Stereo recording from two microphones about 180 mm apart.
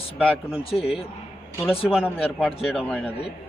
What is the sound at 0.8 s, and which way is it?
Speech, 30° left (ahead or behind).